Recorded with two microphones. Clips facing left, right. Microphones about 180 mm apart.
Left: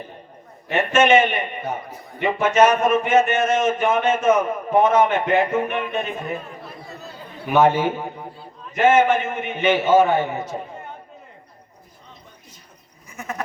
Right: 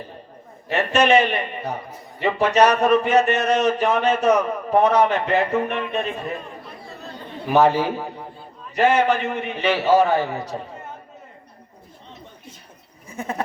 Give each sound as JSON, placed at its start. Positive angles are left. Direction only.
{"t": 0.7, "sound": "a man's voice", "side_deg": -35}
{"t": 7.5, "sound": "a man's voice", "side_deg": -35}
{"t": 13.1, "sound": "goat", "side_deg": -30}